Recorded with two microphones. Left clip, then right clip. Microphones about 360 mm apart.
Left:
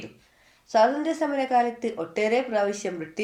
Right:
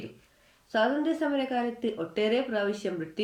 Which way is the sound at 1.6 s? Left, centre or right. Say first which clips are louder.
Left 6 dB; left.